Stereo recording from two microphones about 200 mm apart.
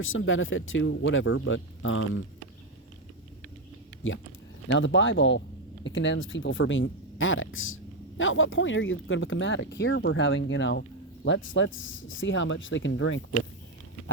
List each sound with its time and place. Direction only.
0.0 s speech: 80° left
4.0 s speech: 80° left
4.7 s speech: 70° left (ahead or behind)